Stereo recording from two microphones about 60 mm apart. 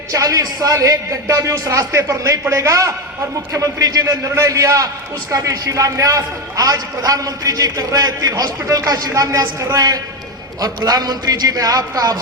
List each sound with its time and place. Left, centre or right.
0.1 s a man's voice: right
3.5 s a man's voice: right
10.6 s a man's voice: right